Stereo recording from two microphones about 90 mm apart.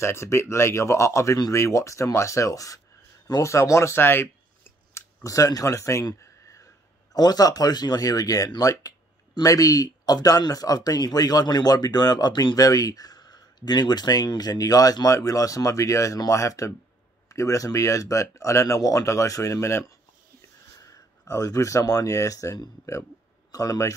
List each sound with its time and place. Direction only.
0.0 s speech: 30° left (ahead or behind)
3.3 s scissors: 40° left (ahead or behind)
5.2 s speech: 40° left (ahead or behind)
6.2 s a sound: 35° left (ahead or behind)
7.2 s speech: 45° left (ahead or behind)
20.8 s speech: 40° left (ahead or behind)